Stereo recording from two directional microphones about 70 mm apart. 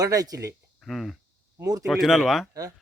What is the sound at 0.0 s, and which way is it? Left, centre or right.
Speech, right.